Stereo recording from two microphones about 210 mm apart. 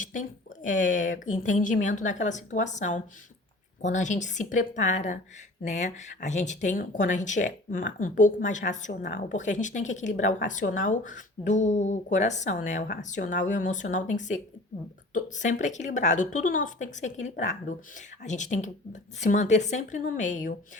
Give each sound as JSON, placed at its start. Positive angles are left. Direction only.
{"t": 0.0, "sound": "speech", "side_deg": 40}
{"t": 8.9, "sound": "speech", "side_deg": 50}